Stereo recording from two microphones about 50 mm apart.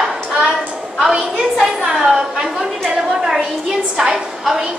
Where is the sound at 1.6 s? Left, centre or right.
Centre.